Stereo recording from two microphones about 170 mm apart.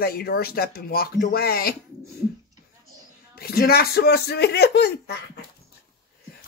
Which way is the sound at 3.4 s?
65° left (ahead or behind).